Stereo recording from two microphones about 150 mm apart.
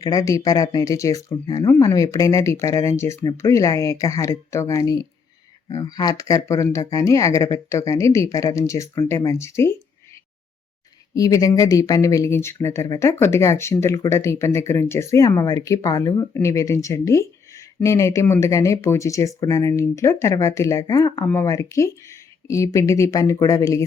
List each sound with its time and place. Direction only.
0.0 s speech: 25° left (ahead or behind)
11.1 s speech: 25° left (ahead or behind)